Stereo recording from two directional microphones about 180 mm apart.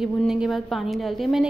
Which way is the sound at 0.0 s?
5° right (ahead or behind).